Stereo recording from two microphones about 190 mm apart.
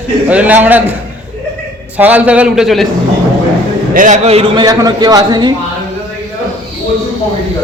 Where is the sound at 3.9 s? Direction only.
40° right (ahead or behind).